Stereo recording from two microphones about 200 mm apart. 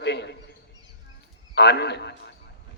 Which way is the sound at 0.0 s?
60° left (ahead or behind).